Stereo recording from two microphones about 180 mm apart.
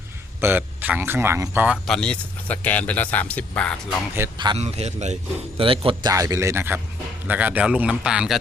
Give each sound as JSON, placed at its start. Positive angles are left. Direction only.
{"t": 0.4, "sound": "speech", "side_deg": -10}
{"t": 1.9, "sound": "speech", "side_deg": 5}
{"t": 4.2, "sound": "speech", "side_deg": -15}
{"t": 4.5, "sound": "a man's voice", "side_deg": -35}